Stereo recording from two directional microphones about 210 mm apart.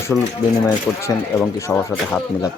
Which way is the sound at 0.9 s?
5° left (ahead or behind).